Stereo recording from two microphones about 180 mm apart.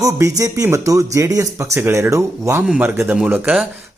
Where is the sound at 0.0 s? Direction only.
20° right (ahead or behind).